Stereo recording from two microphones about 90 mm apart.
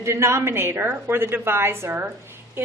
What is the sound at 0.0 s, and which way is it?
A woman's voice, 30° right (ahead or behind).